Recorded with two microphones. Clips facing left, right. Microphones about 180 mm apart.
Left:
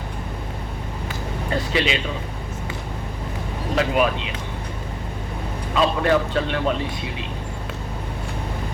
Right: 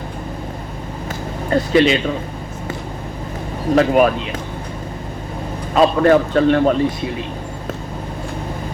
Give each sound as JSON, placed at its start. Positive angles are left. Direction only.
{"t": 1.5, "sound": "a man's voice", "side_deg": -45}
{"t": 3.8, "sound": "a man's voice", "side_deg": -45}
{"t": 5.7, "sound": "a man's voice", "side_deg": -45}